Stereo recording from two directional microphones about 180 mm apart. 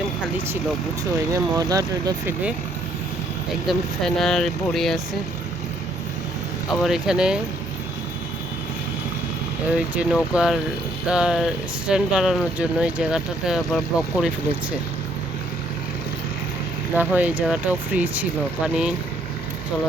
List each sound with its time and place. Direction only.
1.3 s speech: 20° right (ahead or behind)
3.7 s speech: centre (ahead or behind)
6.7 s speech: centre (ahead or behind)
9.6 s speech: 5° right (ahead or behind)
16.9 s speech: 10° right (ahead or behind)